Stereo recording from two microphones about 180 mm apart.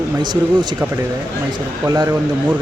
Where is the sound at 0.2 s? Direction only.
25° right (ahead or behind).